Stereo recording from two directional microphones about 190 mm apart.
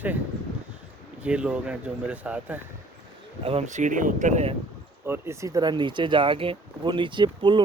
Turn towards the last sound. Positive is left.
turn(degrees=-25)  # may be behind; listen again after turning